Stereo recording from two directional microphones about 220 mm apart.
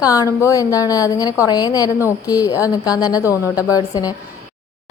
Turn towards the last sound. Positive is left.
turn(degrees=15)  # may be behind; listen again after turning